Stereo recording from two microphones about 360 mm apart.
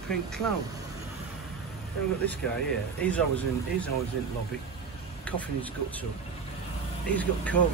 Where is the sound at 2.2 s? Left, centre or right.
Centre.